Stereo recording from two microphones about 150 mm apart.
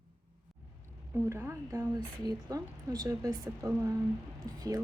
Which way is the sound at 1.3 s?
20° right (ahead or behind).